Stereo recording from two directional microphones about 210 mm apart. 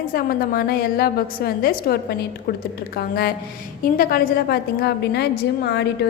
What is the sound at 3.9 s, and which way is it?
A woman's voice, 45° left (ahead or behind).